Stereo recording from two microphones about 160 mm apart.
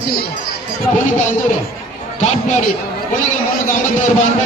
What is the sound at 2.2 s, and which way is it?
Speech, 45° left (ahead or behind).